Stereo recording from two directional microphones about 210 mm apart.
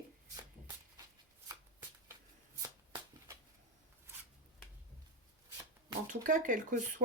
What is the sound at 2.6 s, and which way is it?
Shuffling cards, 15° right (ahead or behind).